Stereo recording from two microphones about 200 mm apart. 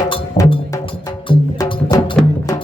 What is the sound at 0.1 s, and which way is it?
Music, 25° left (ahead or behind).